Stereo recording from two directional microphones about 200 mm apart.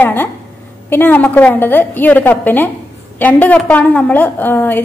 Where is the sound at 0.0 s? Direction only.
10° left (ahead or behind).